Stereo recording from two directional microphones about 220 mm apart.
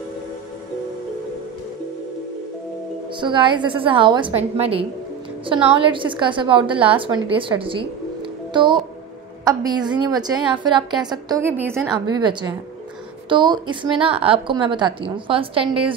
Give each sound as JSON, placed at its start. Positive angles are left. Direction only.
{"t": 3.2, "sound": "a woman's voice", "side_deg": -20}
{"t": 13.3, "sound": "a woman's voice", "side_deg": -20}